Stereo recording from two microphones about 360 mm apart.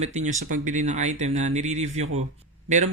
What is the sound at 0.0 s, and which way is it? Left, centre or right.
Speech, centre.